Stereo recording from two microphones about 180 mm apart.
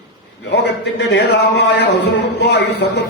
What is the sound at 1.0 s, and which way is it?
A man's voice, 75° left (ahead or behind).